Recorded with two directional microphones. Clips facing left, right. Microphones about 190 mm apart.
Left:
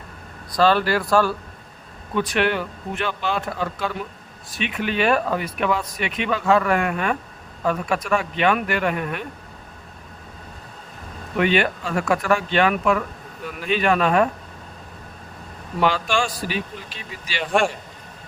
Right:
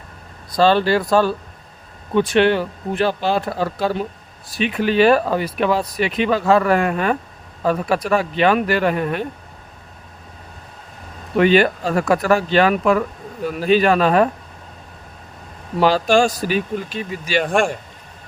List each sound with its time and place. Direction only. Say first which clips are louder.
0.5 s speech: right 3 dB; 30° right (ahead or behind)
11.3 s speech: right 6 dB; 35° right (ahead or behind)
15.8 s speech: right 6 dB; 40° right (ahead or behind)